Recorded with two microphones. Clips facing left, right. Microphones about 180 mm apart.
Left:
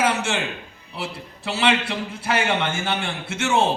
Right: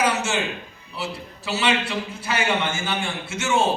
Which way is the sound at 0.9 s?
60° left (ahead or behind).